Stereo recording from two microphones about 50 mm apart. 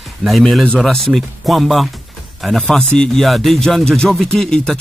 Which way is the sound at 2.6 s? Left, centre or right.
Centre.